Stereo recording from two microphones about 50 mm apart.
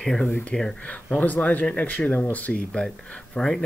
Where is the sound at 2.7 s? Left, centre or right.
Centre.